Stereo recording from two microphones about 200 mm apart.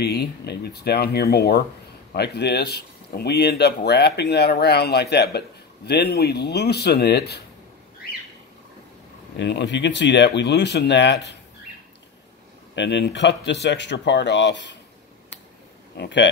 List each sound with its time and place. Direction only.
0.0 s speech: 55° left (ahead or behind)
9.4 s speech: 60° left (ahead or behind)
12.7 s speech: 60° left (ahead or behind)
16.0 s speech: 60° left (ahead or behind)